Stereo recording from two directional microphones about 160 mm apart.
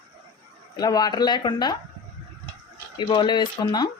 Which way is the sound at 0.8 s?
25° left (ahead or behind).